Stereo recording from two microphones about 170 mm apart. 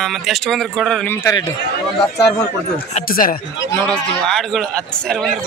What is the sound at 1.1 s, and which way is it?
Speech, 20° left (ahead or behind).